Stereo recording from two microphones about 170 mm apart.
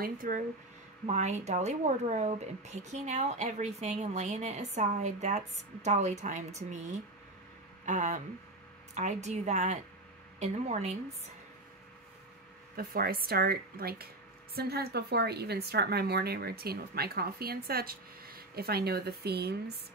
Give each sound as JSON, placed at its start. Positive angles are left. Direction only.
{"t": 0.0, "sound": "speech", "side_deg": -55}
{"t": 1.0, "sound": "speech", "side_deg": -45}
{"t": 12.7, "sound": "speech", "side_deg": -60}